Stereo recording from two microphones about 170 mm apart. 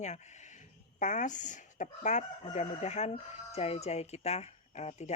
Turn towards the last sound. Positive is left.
turn(degrees=40)  # may be behind; listen again after turning